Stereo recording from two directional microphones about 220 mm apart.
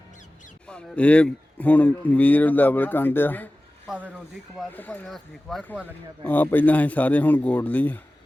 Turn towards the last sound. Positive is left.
turn(degrees=5)  # may be behind; listen again after turning